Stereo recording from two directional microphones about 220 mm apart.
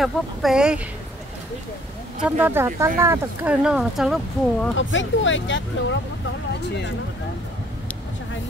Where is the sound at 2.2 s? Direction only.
5° right (ahead or behind).